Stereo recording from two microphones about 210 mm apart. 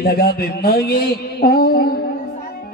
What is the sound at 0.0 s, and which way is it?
A man's voice, 45° left (ahead or behind).